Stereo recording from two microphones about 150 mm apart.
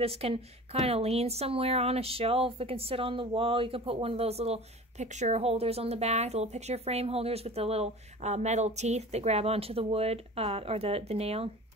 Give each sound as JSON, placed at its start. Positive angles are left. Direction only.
{"t": 0.0, "sound": "a woman's voice", "side_deg": -40}